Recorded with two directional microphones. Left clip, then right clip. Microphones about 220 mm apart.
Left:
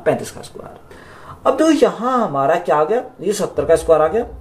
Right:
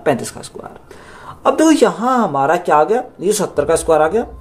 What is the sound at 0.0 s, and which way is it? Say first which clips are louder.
Speech: right 1 dB; 40° right (ahead or behind).